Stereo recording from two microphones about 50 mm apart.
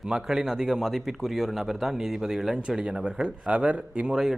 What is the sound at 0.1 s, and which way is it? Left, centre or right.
A man's voice, centre.